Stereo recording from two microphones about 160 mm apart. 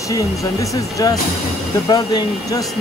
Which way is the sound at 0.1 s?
20° left (ahead or behind).